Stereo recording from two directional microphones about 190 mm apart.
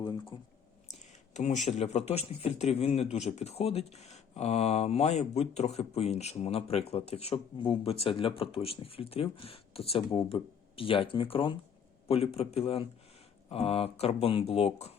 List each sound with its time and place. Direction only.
0.9 s speech: 40° left (ahead or behind)